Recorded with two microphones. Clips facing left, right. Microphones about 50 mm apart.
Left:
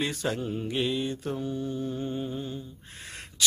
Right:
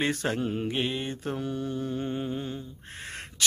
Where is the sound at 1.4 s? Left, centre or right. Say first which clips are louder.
Even; right.